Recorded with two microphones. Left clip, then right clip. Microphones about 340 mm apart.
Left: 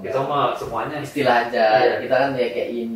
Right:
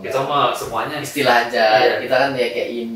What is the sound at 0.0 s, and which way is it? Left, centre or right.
Speech, centre.